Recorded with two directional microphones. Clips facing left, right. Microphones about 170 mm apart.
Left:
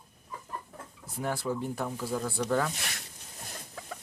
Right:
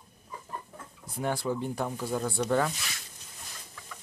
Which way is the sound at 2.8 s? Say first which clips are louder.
Left 2 dB; 60° left (ahead or behind).